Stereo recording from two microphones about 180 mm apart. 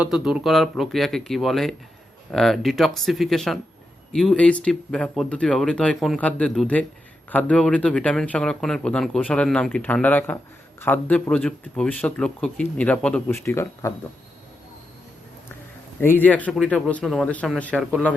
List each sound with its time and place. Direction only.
0.0 s speech: 5° right (ahead or behind)
13.4 s speech: 15° left (ahead or behind)
16.0 s speech: 10° left (ahead or behind)